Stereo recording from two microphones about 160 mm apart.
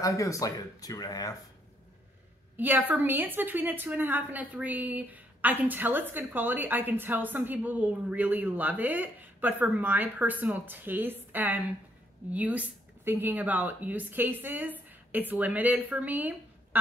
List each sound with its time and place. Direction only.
0.0 s speech: 20° left (ahead or behind)
2.5 s a woman's voice: 10° right (ahead or behind)